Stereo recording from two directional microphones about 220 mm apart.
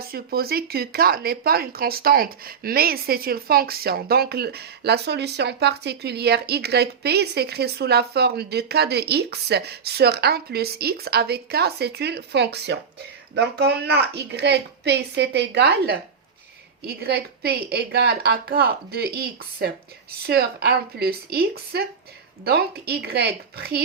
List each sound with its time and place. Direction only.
0.0 s speech: 45° right (ahead or behind)